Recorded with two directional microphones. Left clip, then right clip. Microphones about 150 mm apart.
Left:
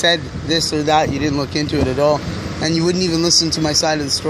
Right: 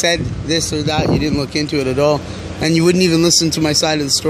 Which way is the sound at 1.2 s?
25° right (ahead or behind).